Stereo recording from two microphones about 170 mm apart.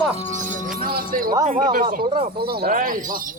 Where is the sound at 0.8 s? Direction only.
60° right (ahead or behind).